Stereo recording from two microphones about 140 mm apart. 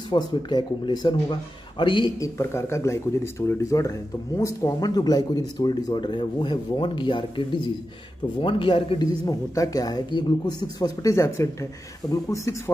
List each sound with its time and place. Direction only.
0.1 s a man's voice: 30° left (ahead or behind)
2.1 s a man's voice: 20° left (ahead or behind); by 9.0 s 40° left (ahead or behind)
9.2 s speech: 25° left (ahead or behind)